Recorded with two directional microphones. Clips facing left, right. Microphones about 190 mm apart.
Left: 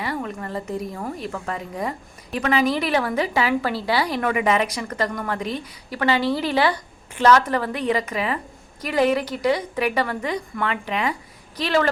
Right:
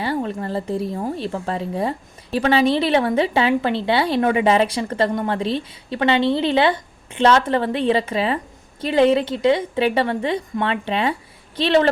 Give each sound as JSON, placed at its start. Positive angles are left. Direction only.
{"t": 0.0, "sound": "speech", "side_deg": -30}